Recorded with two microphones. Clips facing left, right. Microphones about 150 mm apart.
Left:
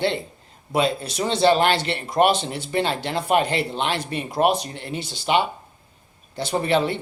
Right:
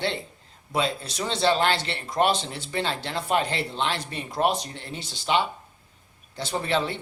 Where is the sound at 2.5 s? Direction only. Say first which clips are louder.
Left 6 dB; 60° left (ahead or behind).